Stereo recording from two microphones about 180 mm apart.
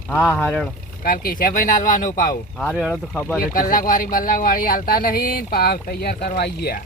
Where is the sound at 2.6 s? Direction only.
5° left (ahead or behind).